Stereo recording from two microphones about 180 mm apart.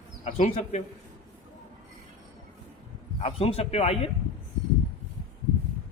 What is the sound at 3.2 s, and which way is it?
Speech, 35° left (ahead or behind).